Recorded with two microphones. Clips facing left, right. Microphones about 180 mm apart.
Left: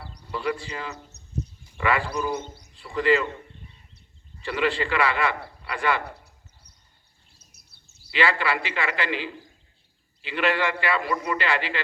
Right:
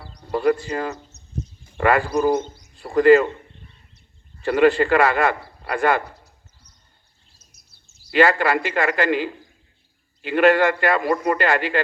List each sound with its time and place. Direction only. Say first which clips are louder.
0.2 s speech: right 9 dB; 50° right (ahead or behind)
1.6 s a sound: right 7 dB; 45° right (ahead or behind)
2.7 s speech: right 9 dB; 45° right (ahead or behind)
4.4 s a man's voice: right 9 dB; 45° right (ahead or behind)
6.1 s a sound: left 3 dB; 65° left (ahead or behind)
8.1 s a man's voice: right 7 dB; 45° right (ahead or behind)